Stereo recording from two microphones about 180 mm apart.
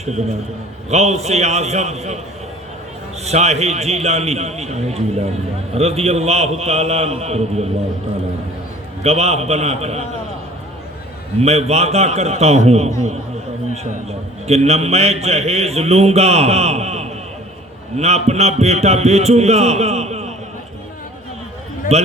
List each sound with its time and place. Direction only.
0.0 s a man's voice: 40° right (ahead or behind)
3.2 s a man's voice: 35° right (ahead or behind)
9.0 s a man's voice: 35° right (ahead or behind)
11.4 s a man's voice: 35° right (ahead or behind)
14.1 s a man's voice: 35° right (ahead or behind)
21.9 s a man's voice: 35° right (ahead or behind)